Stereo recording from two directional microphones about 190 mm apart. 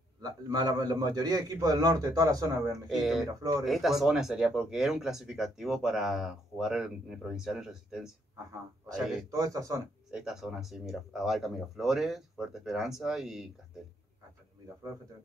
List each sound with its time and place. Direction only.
0.2 s a man's voice: 20° right (ahead or behind)
2.9 s speech: centre (ahead or behind)
9.3 s speech: 20° right (ahead or behind)
10.1 s speech: centre (ahead or behind)